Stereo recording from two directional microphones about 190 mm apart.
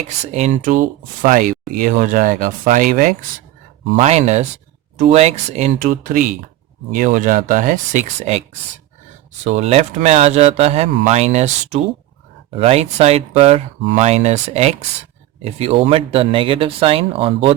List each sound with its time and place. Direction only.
0.3 s speech: 35° right (ahead or behind)
9.4 s speech: 35° right (ahead or behind)